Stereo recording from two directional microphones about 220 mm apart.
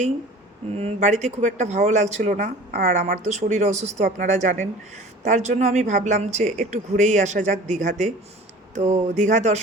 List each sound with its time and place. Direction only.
0.7 s speech: 30° right (ahead or behind)